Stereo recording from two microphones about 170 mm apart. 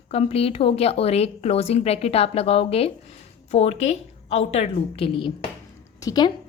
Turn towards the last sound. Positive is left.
turn(degrees=25)  # may be behind; listen again after turning